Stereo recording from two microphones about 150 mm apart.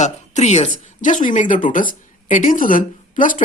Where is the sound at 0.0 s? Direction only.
50° left (ahead or behind).